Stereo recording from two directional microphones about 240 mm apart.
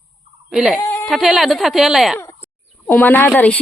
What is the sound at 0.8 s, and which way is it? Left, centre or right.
A woman's voice, centre.